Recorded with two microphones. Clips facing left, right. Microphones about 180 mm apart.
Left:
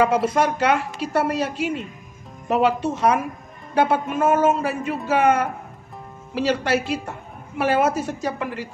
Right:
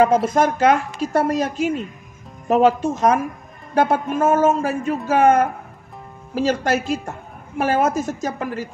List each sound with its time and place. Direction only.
0.0 s a woman's voice: 45° right (ahead or behind)